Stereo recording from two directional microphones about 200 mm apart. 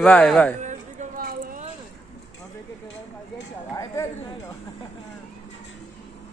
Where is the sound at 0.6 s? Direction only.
35° right (ahead or behind).